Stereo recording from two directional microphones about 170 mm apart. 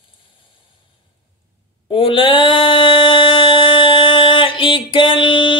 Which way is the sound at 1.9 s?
30° left (ahead or behind).